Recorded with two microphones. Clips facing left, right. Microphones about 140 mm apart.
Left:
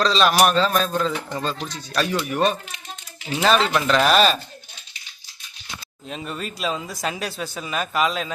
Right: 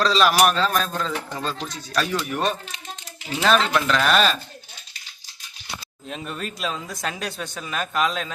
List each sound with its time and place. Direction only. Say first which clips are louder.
0.0 s speech: even; 5° right (ahead or behind)
3.8 s speech: left 3 dB; 30° left (ahead or behind)
6.1 s speech: left 1 dB; centre (ahead or behind)